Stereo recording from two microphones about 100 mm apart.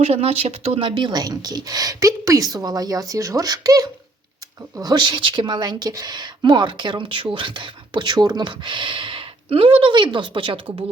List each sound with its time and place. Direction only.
0.0 s a woman's voice: 90° right; by 10.6 s 55° right (ahead or behind)